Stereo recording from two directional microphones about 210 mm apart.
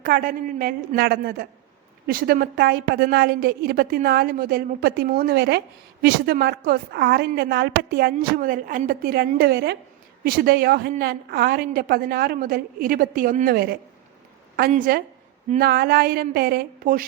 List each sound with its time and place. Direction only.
0.0 s a woman's voice: 40° right (ahead or behind)